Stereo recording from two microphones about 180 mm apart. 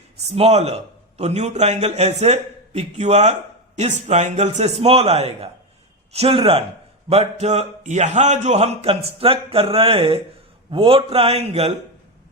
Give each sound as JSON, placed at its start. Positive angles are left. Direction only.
{"t": 0.3, "sound": "a man's voice", "side_deg": -35}